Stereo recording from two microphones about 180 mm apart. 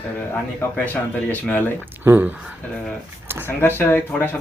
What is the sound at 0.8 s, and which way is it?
Speech, 10° left (ahead or behind).